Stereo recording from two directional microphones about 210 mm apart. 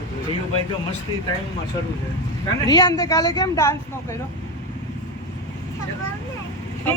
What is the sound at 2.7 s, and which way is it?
Speech, 15° left (ahead or behind).